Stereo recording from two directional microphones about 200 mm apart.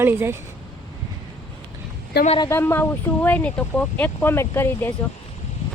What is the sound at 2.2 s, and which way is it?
Speech, 30° left (ahead or behind).